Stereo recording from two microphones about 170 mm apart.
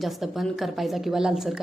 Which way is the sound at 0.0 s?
Centre (ahead or behind).